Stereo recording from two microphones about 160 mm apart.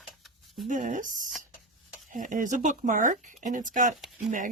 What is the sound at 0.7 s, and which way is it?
Speech, 55° right (ahead or behind).